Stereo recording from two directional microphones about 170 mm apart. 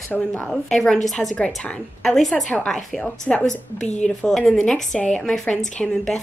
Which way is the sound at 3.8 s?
45° left (ahead or behind).